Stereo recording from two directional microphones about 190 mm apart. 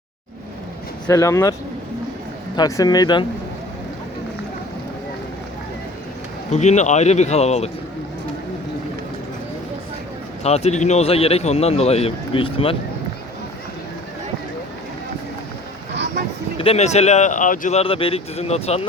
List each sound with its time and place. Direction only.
1.0 s speech: 15° left (ahead or behind)
2.6 s speech: 20° left (ahead or behind)
6.5 s speech: 35° left (ahead or behind)
10.4 s speech: 35° left (ahead or behind)
16.6 s speech: 35° left (ahead or behind)